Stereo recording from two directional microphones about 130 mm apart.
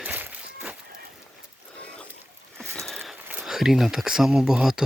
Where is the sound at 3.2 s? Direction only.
15° right (ahead or behind).